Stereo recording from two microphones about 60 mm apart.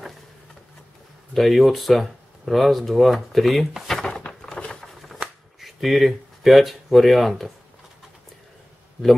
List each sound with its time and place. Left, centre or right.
1.3 s speech: centre
4.6 s a sound: centre
5.0 s shuffling cards: centre